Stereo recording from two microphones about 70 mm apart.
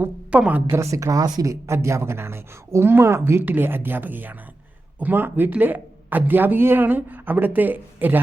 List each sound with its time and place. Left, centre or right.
0.3 s speech: centre
0.7 s speech: right
1.6 s speech: right